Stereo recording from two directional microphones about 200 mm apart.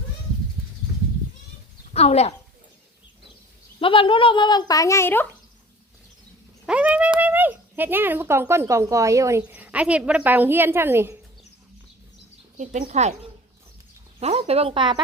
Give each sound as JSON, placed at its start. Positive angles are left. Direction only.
{"t": 1.9, "sound": "speech", "side_deg": 35}
{"t": 3.8, "sound": "speech", "side_deg": 25}
{"t": 6.7, "sound": "speech", "side_deg": -5}
{"t": 12.5, "sound": "speech", "side_deg": -35}
{"t": 14.2, "sound": "speech", "side_deg": -30}